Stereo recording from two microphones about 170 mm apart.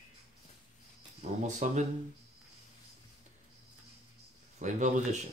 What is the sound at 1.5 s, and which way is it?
Speech, 45° right (ahead or behind).